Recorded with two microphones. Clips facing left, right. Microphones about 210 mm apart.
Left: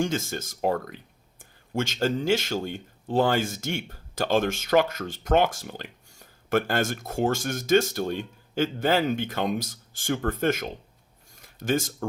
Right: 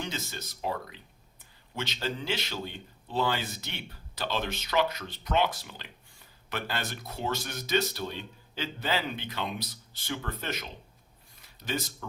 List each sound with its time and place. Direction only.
0.0 s speech: 50° left (ahead or behind)